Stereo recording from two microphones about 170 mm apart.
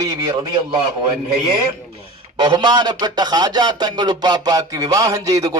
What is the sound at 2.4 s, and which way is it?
Speech, 25° right (ahead or behind).